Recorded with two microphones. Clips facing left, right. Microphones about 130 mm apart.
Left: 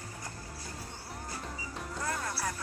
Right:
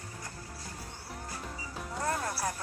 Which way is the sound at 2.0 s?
35° right (ahead or behind).